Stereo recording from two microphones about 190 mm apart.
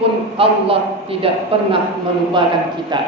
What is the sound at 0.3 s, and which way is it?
A man's voice, 30° right (ahead or behind).